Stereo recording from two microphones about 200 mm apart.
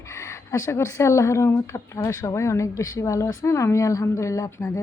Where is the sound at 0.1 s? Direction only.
15° left (ahead or behind).